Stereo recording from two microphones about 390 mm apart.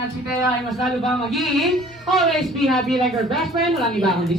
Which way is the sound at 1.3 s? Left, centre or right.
Centre.